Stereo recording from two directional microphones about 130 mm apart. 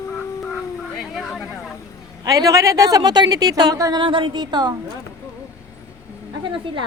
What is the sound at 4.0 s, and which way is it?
Speech, 40° right (ahead or behind).